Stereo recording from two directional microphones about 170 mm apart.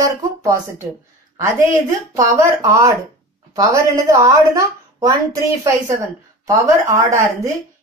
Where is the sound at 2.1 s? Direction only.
20° right (ahead or behind).